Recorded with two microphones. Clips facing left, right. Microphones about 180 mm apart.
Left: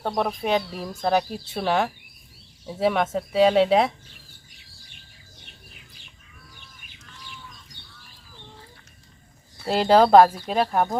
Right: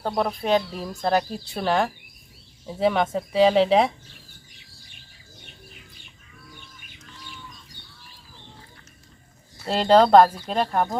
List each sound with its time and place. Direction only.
0.0 s speech: centre (ahead or behind)
9.6 s speech: 5° left (ahead or behind)